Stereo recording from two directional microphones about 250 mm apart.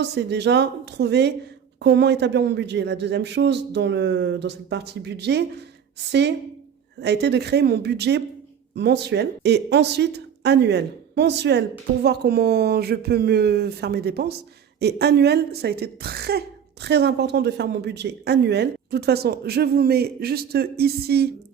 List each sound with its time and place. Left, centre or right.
0.0 s a woman's voice: right